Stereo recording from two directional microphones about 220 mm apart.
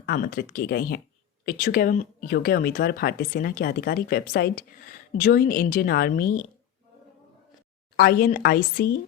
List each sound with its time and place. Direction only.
0.0 s speech: 45° left (ahead or behind)
7.9 s speech: 45° left (ahead or behind)